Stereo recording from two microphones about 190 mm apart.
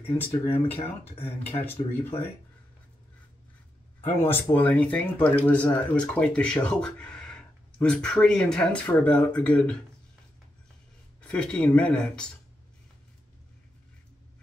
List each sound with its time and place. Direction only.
0.0 s speech: 10° left (ahead or behind)
0.7 s speech: 30° left (ahead or behind)
1.7 s speech: 10° left (ahead or behind)
4.2 s speech: 10° left (ahead or behind)
11.1 s speech: 5° left (ahead or behind)